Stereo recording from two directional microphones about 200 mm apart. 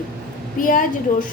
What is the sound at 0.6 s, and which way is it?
Speech, 40° left (ahead or behind).